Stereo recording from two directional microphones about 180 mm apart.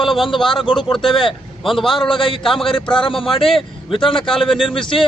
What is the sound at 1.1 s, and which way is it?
Speech, 30° left (ahead or behind).